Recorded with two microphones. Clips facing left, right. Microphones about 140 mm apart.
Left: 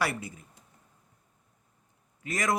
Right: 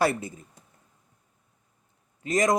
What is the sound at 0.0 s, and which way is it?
Speech, 25° right (ahead or behind).